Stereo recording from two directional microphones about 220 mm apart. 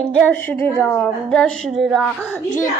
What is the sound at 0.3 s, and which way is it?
A woman's voice, 5° left (ahead or behind).